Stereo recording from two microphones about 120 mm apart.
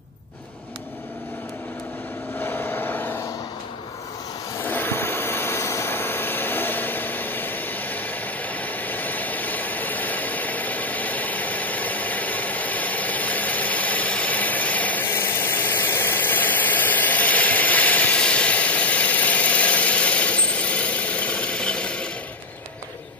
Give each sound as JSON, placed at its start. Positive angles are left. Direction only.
{"t": 2.4, "sound": "vehicle", "side_deg": 15}
{"t": 4.6, "sound": "vehicle", "side_deg": 15}